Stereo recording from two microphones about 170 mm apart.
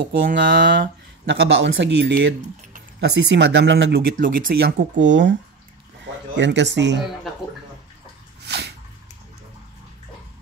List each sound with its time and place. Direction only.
0.4 s speech: 90° right
6.3 s speech: 90° right
8.4 s bathtub: 80° right